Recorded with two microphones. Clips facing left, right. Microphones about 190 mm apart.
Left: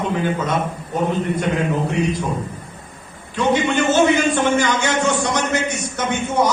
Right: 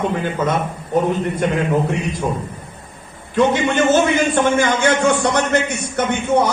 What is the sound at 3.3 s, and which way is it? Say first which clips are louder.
A man's voice: right 2 dB; 50° right (ahead or behind).